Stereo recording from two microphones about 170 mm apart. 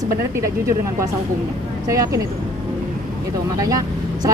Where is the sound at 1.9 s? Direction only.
20° right (ahead or behind).